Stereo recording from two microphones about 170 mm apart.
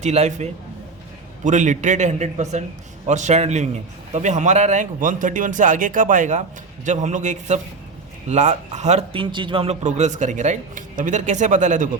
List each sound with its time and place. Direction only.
0.0 s a man's voice: 40° right (ahead or behind)